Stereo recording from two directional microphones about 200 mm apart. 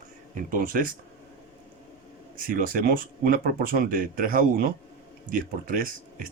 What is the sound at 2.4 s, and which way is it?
Speech, 45° right (ahead or behind).